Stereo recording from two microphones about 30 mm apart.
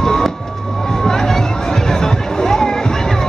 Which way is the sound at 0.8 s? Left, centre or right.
Centre.